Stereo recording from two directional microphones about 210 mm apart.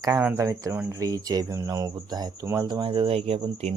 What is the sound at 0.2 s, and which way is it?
Speech, 10° right (ahead or behind).